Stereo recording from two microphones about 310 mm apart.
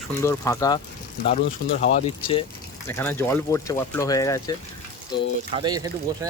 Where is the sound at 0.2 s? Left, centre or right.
Centre.